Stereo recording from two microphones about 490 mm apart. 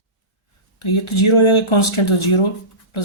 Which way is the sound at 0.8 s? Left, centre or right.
Left.